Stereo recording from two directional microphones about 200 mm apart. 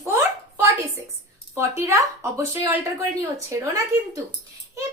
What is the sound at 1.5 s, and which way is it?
A woman's voice, 15° right (ahead or behind).